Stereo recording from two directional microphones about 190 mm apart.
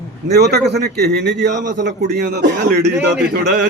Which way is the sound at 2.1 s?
55° right (ahead or behind).